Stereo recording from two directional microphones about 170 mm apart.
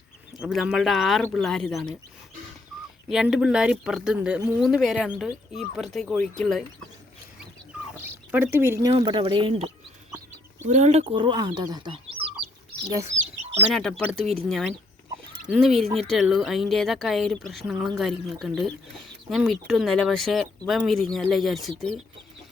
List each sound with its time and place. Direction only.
0.3 s speech: centre (ahead or behind)
3.1 s speech: 5° right (ahead or behind)
7.9 s a sound: 10° right (ahead or behind)
8.9 s speech: 30° right (ahead or behind)
10.7 s speech: 40° right (ahead or behind)
13.1 s speech: 5° left (ahead or behind)